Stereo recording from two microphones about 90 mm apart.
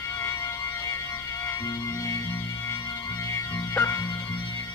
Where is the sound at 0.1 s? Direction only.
35° left (ahead or behind).